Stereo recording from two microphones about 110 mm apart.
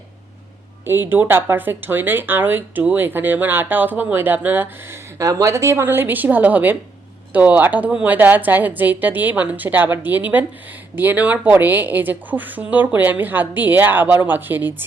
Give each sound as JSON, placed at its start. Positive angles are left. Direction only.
{"t": 1.1, "sound": "speech", "side_deg": -20}